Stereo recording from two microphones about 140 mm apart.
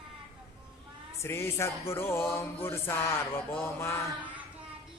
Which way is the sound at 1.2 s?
20° left (ahead or behind).